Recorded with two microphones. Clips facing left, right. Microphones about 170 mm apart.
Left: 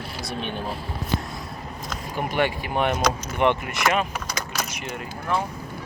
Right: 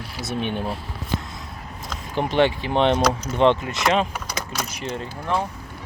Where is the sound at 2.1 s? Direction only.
25° right (ahead or behind).